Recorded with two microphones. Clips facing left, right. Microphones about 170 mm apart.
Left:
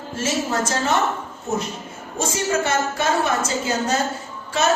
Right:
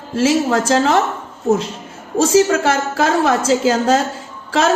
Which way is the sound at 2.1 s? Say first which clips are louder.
Right 10 dB; 90° right.